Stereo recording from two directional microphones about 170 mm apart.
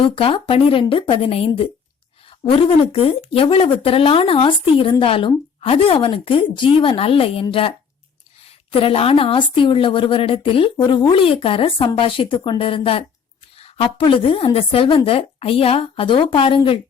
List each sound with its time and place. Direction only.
0.0 s speech: 30° left (ahead or behind)
8.7 s speech: 35° left (ahead or behind)